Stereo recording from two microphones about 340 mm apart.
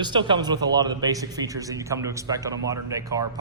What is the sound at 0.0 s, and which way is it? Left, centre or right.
A man's voice, centre.